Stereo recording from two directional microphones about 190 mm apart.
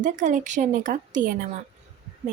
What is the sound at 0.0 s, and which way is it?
A woman's voice, 40° right (ahead or behind).